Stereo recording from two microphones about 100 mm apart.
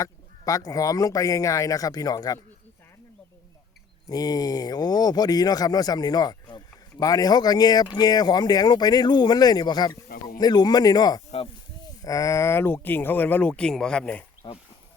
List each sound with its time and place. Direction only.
0.0 s speech: 35° left (ahead or behind)
4.1 s speech: 40° left (ahead or behind); by 14.3 s 15° left (ahead or behind)